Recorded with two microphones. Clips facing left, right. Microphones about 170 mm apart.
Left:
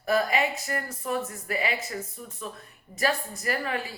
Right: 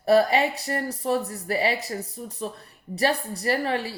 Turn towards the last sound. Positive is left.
turn(degrees=-35)  # may be behind; listen again after turning